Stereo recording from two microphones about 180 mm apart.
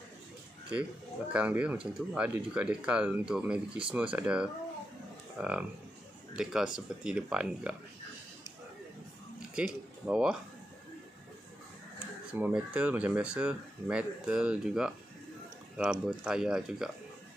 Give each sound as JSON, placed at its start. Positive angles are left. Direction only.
{"t": 1.3, "sound": "speech", "side_deg": -5}
{"t": 9.6, "sound": "speech", "side_deg": -5}
{"t": 12.3, "sound": "speech", "side_deg": -10}